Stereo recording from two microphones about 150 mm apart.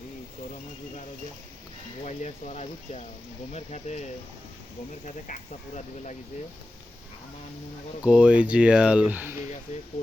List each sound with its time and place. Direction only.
2.0 s speech: 50° left (ahead or behind)
5.3 s speech: 50° left (ahead or behind)
8.0 s speech: 10° right (ahead or behind)